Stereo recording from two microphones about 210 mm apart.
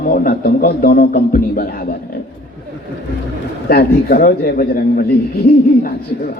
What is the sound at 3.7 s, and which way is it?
A man's voice, 45° left (ahead or behind).